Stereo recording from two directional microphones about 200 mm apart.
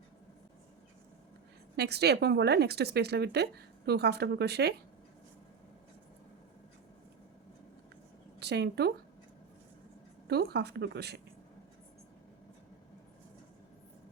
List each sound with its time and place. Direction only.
1.7 s speech: 55° right (ahead or behind)
8.4 s speech: 55° right (ahead or behind)
10.2 s speech: 55° right (ahead or behind)